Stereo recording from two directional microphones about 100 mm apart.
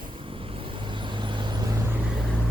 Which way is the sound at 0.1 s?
60° right (ahead or behind).